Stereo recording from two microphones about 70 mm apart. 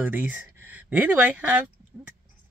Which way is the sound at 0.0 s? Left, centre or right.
Right.